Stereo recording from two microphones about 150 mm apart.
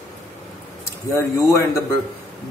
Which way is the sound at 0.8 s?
20° left (ahead or behind).